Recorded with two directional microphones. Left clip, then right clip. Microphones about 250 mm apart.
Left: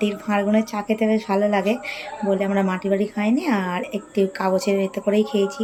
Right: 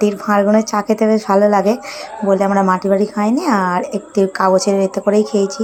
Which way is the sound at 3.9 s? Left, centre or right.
Centre.